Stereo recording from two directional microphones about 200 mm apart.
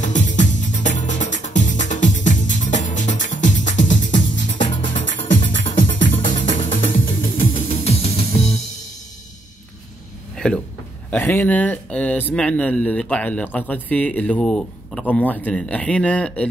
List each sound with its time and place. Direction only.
0.0 s music: 40° left (ahead or behind)
10.3 s a sound: 5° left (ahead or behind)
11.1 s speech: 10° left (ahead or behind)